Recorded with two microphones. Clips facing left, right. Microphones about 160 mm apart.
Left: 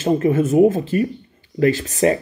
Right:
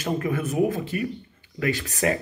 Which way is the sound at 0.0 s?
25° left (ahead or behind).